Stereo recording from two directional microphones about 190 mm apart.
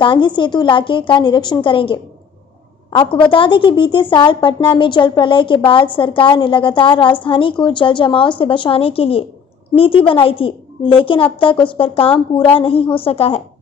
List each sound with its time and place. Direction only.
0.0 s a woman's voice: 25° left (ahead or behind)